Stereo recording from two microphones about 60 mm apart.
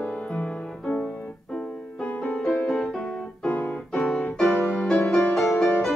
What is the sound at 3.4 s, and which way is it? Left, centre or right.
Keyboard, left.